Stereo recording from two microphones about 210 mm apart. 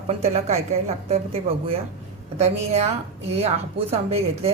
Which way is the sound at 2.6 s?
30° right (ahead or behind).